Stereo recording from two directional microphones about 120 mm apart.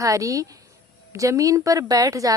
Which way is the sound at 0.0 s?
25° right (ahead or behind).